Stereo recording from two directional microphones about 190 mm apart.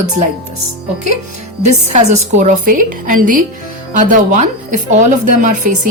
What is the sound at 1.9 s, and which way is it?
A woman's voice, 40° right (ahead or behind).